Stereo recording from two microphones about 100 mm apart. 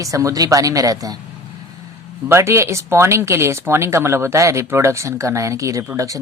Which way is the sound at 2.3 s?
30° right (ahead or behind).